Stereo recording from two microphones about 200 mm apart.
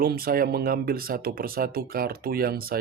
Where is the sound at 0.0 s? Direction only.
50° right (ahead or behind).